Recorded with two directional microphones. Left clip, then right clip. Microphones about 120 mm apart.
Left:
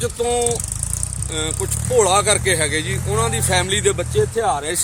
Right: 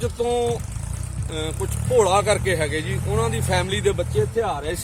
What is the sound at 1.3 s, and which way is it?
Speech, 10° right (ahead or behind).